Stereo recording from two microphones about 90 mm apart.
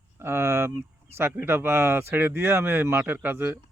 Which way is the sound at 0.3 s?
30° right (ahead or behind).